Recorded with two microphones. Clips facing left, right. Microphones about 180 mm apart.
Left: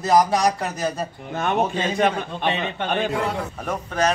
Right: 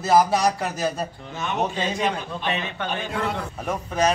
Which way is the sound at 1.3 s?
55° left (ahead or behind).